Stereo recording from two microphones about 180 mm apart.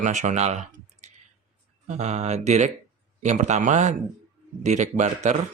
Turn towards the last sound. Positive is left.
turn(degrees=-40)  # may be behind; listen again after turning